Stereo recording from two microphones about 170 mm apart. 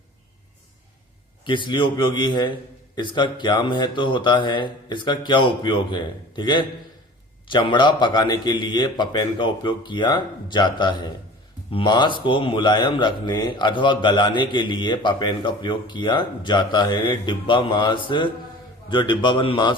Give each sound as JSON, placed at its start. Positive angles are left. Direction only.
{"t": 1.5, "sound": "speech", "side_deg": 30}